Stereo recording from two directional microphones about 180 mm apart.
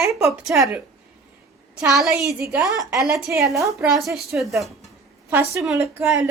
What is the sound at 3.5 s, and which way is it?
Speech, 15° right (ahead or behind).